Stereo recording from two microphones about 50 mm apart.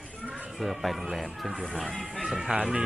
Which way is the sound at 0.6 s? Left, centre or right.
Centre.